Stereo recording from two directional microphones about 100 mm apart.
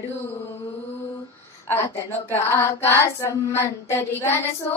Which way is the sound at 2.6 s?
25° left (ahead or behind).